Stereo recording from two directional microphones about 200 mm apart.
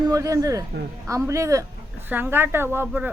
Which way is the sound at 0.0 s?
15° right (ahead or behind).